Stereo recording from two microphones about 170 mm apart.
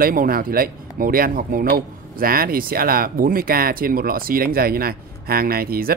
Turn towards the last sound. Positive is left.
turn(degrees=-60)  # may be behind; listen again after turning